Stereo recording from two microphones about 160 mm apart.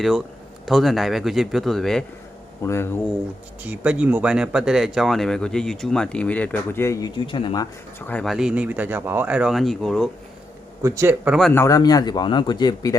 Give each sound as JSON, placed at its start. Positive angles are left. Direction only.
{"t": 0.6, "sound": "speech", "side_deg": 0}
{"t": 2.6, "sound": "speech", "side_deg": 15}
{"t": 3.6, "sound": "speech", "side_deg": -10}
{"t": 7.2, "sound": "speech", "side_deg": 35}
{"t": 7.9, "sound": "speech", "side_deg": 10}
{"t": 10.8, "sound": "speech", "side_deg": -15}
{"t": 11.5, "sound": "a man's voice", "side_deg": 20}